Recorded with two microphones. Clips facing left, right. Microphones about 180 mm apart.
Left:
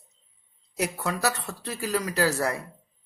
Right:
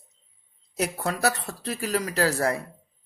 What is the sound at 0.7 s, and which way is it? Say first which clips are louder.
Speech: right 1 dB; 30° right (ahead or behind).